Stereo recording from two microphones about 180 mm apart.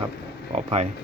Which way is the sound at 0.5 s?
35° right (ahead or behind).